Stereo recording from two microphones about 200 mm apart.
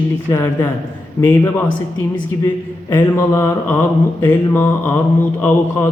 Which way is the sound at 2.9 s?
10° left (ahead or behind).